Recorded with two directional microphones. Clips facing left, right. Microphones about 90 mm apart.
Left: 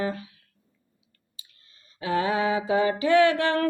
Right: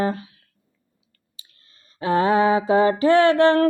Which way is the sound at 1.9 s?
40° right (ahead or behind).